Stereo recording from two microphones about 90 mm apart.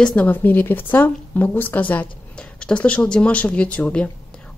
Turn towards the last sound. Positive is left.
turn(degrees=15)  # may be behind; listen again after turning